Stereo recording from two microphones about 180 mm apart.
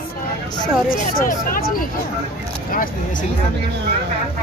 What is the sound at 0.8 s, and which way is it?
Speech, 50° left (ahead or behind).